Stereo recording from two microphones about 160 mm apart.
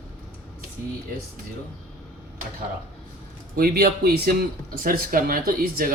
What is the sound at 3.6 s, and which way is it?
Speech, 75° right (ahead or behind).